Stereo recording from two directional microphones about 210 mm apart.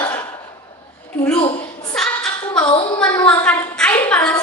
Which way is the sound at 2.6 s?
25° left (ahead or behind).